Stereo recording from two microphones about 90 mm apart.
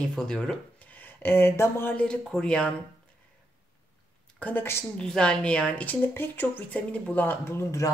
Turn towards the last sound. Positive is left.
turn(degrees=30)  # may be behind; listen again after turning